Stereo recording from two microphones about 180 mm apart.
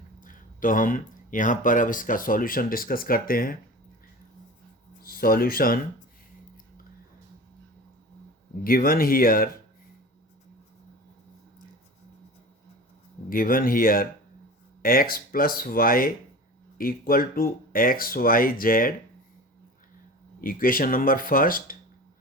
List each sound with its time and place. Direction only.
0.2 s speech: 50° left (ahead or behind)
5.0 s speech: 55° left (ahead or behind)
8.6 s speech: 55° left (ahead or behind)
13.3 s speech: 50° left (ahead or behind)
20.4 s speech: 50° left (ahead or behind)